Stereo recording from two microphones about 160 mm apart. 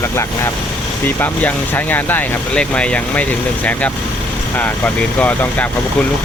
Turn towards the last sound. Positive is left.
turn(degrees=10)  # may be behind; listen again after turning